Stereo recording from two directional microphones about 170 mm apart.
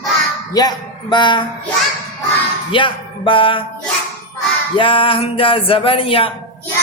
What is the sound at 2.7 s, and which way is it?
Music, 30° left (ahead or behind).